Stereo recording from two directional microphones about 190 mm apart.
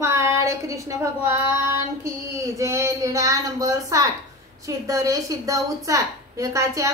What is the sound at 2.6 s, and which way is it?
A woman's voice, 15° right (ahead or behind).